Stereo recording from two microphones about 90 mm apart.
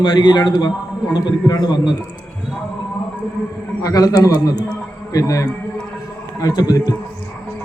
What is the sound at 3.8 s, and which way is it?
A man's voice, 40° left (ahead or behind).